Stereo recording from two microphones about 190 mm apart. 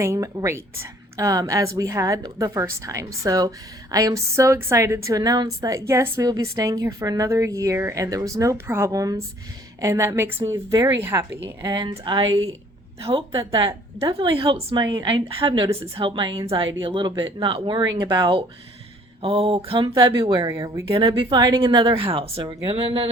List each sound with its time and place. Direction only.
0.0 s a woman's voice: 15° right (ahead or behind)